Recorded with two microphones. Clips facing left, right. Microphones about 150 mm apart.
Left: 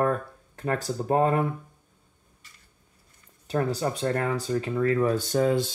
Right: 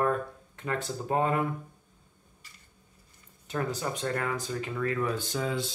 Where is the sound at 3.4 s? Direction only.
35° left (ahead or behind).